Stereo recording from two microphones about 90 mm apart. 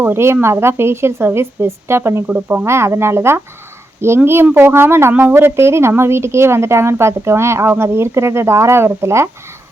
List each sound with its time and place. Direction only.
0.0 s a woman's voice: 25° right (ahead or behind)
2.6 s a woman's voice: 30° right (ahead or behind)